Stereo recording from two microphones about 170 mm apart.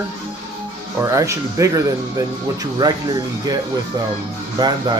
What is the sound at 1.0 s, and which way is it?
Speech, 20° right (ahead or behind).